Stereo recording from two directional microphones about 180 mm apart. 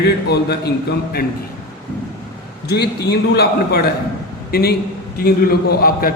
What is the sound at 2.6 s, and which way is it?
A man's voice, 65° left (ahead or behind).